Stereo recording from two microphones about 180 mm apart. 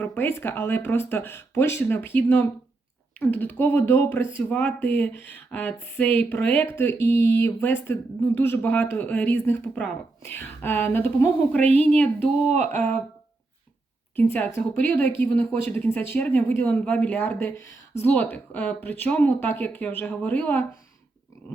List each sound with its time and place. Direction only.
0.0 s a woman's voice: 10° left (ahead or behind)
12.6 s speech: 35° right (ahead or behind)
14.2 s a woman's voice: 10° left (ahead or behind)